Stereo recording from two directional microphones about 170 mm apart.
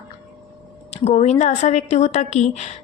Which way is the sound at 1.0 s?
40° left (ahead or behind).